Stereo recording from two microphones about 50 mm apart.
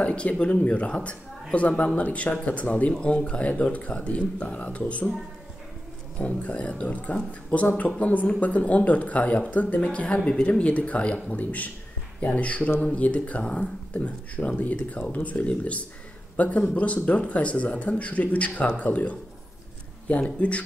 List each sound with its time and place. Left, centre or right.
0.0 s speech: left
6.1 s a man's voice: left